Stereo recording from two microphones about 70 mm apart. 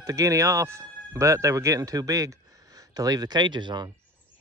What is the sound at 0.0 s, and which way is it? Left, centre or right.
Speech, right.